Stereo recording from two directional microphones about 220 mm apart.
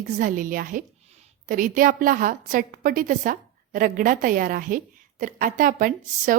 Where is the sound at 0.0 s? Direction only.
35° right (ahead or behind).